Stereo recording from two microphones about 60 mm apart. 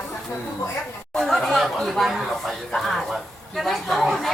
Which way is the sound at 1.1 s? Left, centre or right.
Centre.